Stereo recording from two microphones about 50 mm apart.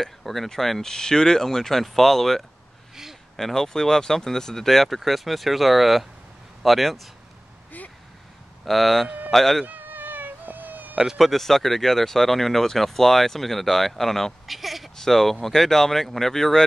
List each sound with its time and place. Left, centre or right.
0.0 s speech: centre
8.6 s speech: centre
9.7 s cat: right
11.1 s speech: centre